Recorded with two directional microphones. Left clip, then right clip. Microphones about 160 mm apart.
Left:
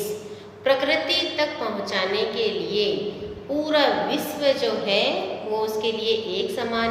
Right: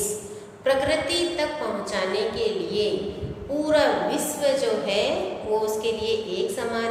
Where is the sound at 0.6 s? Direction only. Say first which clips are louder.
Left 1 dB; 25° left (ahead or behind).